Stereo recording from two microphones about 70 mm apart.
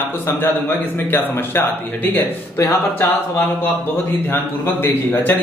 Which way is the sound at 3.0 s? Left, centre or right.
Left.